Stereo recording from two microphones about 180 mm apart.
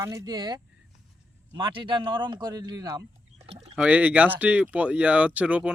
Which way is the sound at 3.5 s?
35° right (ahead or behind).